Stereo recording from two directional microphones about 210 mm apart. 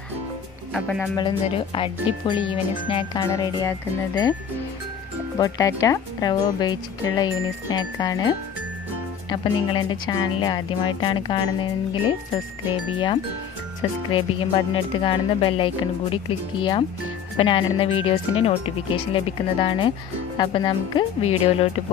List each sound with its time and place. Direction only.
0.7 s speech: centre (ahead or behind)
1.1 s speech: 25° left (ahead or behind)
5.4 s speech: 15° left (ahead or behind)